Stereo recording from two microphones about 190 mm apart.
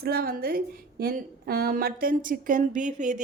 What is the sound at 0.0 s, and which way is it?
A woman's voice, 55° right (ahead or behind).